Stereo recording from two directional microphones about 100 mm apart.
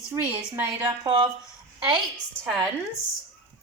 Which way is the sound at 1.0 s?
50° right (ahead or behind).